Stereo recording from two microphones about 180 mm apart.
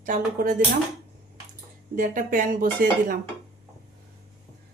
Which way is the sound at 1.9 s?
45° right (ahead or behind).